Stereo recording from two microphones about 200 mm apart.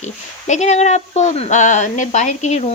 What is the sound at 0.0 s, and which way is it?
Speech, 35° left (ahead or behind).